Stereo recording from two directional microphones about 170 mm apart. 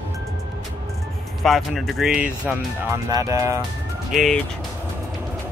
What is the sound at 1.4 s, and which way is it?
Speech, centre (ahead or behind).